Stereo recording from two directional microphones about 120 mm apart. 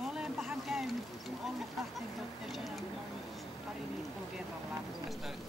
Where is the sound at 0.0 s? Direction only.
5° right (ahead or behind).